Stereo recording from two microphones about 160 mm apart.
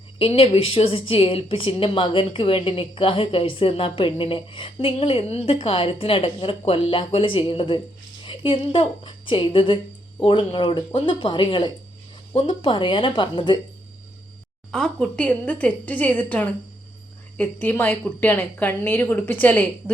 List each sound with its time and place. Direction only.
0.2 s a woman's voice: 35° left (ahead or behind)
14.7 s a woman's voice: 5° left (ahead or behind)